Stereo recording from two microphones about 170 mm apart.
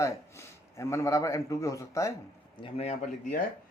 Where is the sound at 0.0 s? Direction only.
15° left (ahead or behind).